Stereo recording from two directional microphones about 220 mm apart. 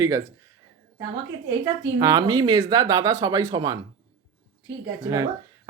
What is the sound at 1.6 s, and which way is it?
Speech, 15° right (ahead or behind).